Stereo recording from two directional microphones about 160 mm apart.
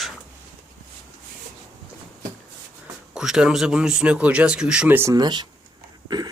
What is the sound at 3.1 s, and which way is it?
Speech, 5° right (ahead or behind).